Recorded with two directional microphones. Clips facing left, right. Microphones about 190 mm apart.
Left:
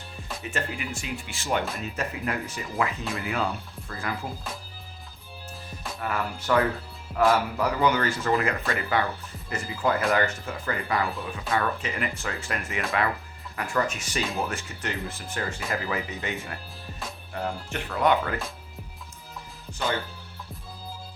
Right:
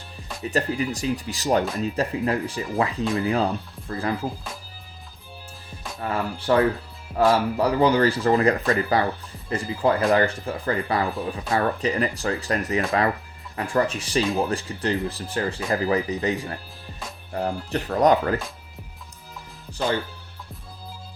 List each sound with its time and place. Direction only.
0.4 s speech: 35° right (ahead or behind)
6.0 s speech: 30° right (ahead or behind)